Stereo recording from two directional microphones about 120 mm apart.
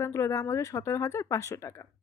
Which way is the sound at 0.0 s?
25° left (ahead or behind).